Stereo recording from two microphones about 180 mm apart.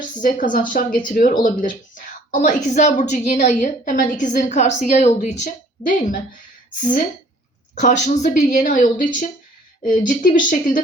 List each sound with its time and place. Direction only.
0.2 s a woman's voice: 45° left (ahead or behind)
7.8 s a woman's voice: 45° left (ahead or behind)